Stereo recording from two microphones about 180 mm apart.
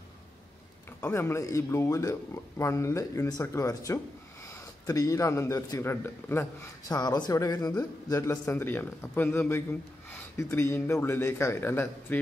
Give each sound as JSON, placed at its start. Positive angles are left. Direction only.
{"t": 1.0, "sound": "speech", "side_deg": 15}